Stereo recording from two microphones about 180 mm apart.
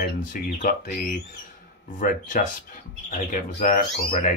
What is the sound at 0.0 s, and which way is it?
Speech, 50° left (ahead or behind).